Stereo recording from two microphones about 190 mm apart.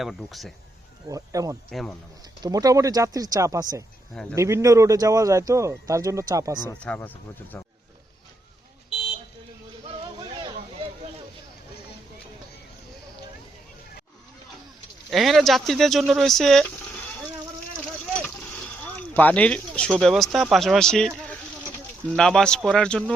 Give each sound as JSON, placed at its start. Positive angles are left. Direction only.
{"t": 0.0, "sound": "speech", "side_deg": 0}
{"t": 1.0, "sound": "speech", "side_deg": -20}
{"t": 1.7, "sound": "speech", "side_deg": 0}
{"t": 2.4, "sound": "speech", "side_deg": -20}
{"t": 4.1, "sound": "speech", "side_deg": 5}
{"t": 4.4, "sound": "speech", "side_deg": -15}
{"t": 6.7, "sound": "speech", "side_deg": 5}
{"t": 9.8, "sound": "a sound", "side_deg": -25}
{"t": 15.1, "sound": "speech", "side_deg": 0}
{"t": 19.1, "sound": "speech", "side_deg": 10}